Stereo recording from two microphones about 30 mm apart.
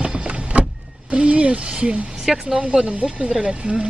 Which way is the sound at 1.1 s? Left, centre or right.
Right.